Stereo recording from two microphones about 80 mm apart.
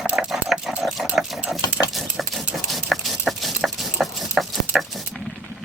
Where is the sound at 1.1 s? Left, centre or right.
Centre.